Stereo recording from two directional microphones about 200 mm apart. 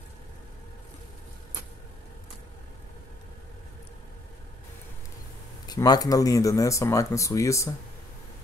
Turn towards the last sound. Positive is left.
turn(degrees=15)  # may be behind; listen again after turning